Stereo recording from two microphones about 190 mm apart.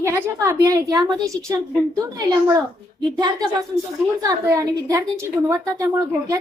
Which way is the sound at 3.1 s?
20° right (ahead or behind).